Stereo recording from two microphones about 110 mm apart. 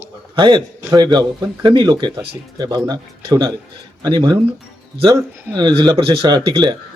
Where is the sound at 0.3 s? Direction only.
45° right (ahead or behind).